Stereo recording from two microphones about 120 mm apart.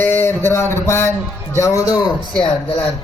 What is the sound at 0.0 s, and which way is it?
A man's voice, 20° left (ahead or behind).